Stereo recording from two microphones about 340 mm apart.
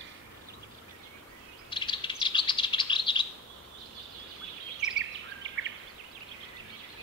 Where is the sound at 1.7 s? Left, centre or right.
Centre.